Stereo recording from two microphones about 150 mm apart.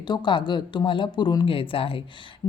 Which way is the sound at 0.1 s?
30° left (ahead or behind).